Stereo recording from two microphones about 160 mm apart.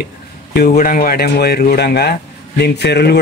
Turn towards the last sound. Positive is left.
turn(degrees=90)